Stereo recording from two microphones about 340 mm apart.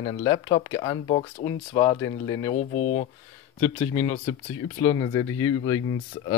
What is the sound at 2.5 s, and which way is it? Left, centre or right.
Speech, left.